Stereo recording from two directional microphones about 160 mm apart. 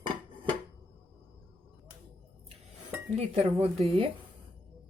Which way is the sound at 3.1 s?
40° right (ahead or behind).